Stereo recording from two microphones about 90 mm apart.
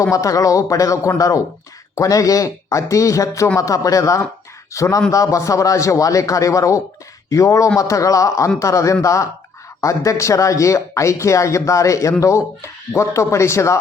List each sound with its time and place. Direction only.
0.0 s speech: 35° left (ahead or behind)